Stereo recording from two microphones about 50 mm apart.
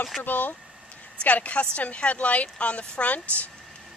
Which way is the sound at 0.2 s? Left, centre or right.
Left.